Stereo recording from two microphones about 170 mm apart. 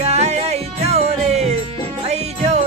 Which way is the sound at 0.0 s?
40° right (ahead or behind).